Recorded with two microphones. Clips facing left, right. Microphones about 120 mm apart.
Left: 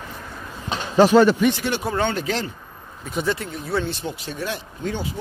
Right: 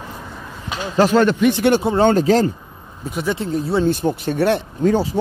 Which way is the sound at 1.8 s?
25° right (ahead or behind).